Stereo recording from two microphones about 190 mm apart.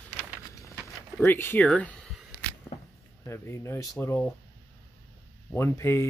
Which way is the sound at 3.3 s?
15° left (ahead or behind).